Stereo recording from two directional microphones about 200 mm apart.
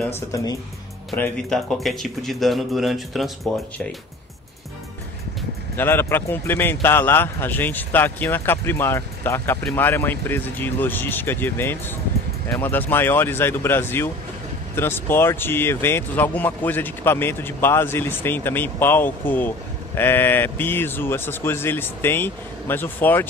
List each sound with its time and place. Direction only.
0.0 s speech: 15° left (ahead or behind)
5.8 s speech: 10° left (ahead or behind)